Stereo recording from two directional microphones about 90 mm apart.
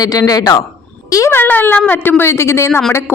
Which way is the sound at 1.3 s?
20° left (ahead or behind).